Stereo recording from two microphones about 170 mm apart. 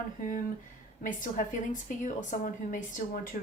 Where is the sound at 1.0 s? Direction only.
50° left (ahead or behind).